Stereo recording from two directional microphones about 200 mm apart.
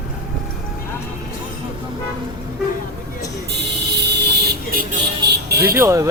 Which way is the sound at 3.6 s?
55° right (ahead or behind).